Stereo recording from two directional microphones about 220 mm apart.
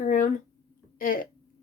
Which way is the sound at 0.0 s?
40° left (ahead or behind).